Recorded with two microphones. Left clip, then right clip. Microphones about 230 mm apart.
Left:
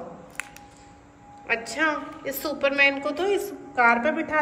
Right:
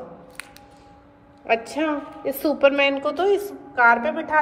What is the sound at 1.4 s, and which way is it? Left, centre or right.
A woman's voice, centre.